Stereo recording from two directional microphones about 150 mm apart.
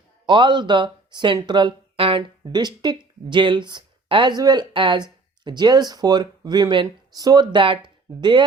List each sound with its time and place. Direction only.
0.3 s speech: 30° right (ahead or behind)